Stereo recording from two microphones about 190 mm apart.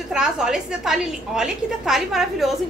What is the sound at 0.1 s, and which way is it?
A woman's voice, 5° right (ahead or behind).